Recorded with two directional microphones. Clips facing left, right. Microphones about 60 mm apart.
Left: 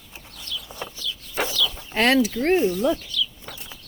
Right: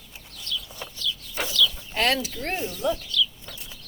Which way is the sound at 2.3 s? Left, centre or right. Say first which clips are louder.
Left 10 dB; left.